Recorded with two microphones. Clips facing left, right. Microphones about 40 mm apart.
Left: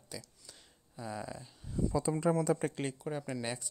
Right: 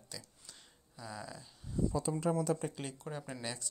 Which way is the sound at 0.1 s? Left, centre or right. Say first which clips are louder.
Left 4 dB; centre.